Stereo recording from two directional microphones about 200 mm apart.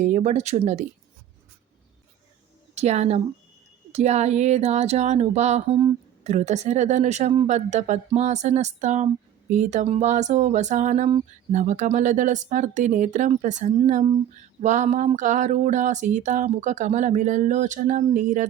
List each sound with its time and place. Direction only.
0.0 s speech: 35° right (ahead or behind)
2.7 s a woman's voice: 35° right (ahead or behind)